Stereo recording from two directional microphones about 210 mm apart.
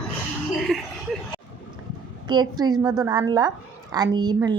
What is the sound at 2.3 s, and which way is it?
A woman's voice, 20° right (ahead or behind).